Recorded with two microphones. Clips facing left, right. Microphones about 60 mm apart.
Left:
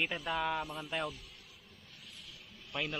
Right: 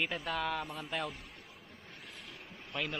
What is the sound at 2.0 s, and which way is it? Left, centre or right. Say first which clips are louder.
Vehicle: right 3 dB; right.